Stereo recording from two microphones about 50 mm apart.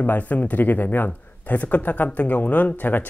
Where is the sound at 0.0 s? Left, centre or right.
Left.